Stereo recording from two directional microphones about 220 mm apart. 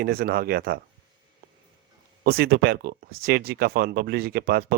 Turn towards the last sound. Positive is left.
turn(degrees=-45)  # may be behind; listen again after turning